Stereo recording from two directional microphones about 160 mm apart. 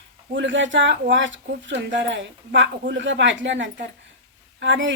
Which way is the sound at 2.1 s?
90° right.